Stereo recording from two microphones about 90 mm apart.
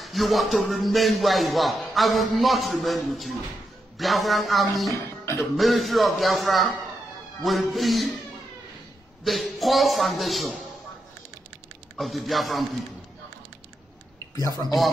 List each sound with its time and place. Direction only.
0.0 s speech: centre (ahead or behind)
4.9 s music: 30° left (ahead or behind)
5.6 s speech: centre (ahead or behind)
9.2 s speech: centre (ahead or behind)
12.0 s speech: centre (ahead or behind)